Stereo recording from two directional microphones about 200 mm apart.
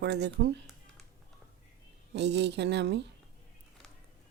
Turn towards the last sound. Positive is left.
turn(degrees=-60)  # may be behind; listen again after turning